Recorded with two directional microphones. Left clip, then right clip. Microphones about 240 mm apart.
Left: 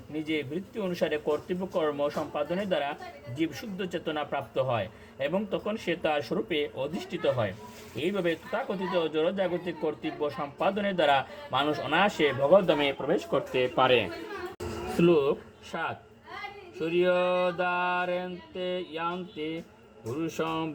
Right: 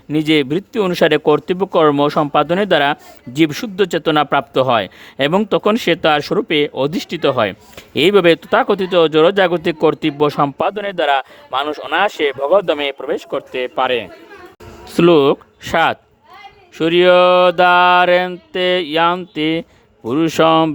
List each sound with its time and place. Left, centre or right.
0.1 s speech: right
15.0 s speech: right